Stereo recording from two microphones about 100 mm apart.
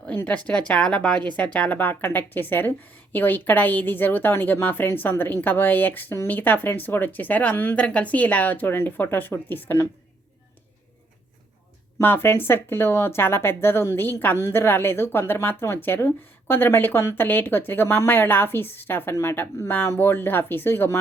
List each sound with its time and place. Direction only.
0.2 s a woman's voice: 10° left (ahead or behind)
11.9 s a woman's voice: 20° left (ahead or behind)